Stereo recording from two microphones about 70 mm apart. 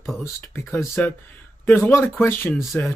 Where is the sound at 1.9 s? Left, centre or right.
Left.